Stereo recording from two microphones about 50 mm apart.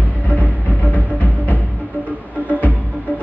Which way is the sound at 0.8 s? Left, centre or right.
Left.